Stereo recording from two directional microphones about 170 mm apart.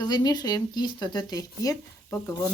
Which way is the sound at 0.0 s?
25° left (ahead or behind).